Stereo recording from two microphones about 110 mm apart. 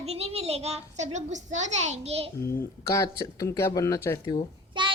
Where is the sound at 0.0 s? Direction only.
70° right (ahead or behind).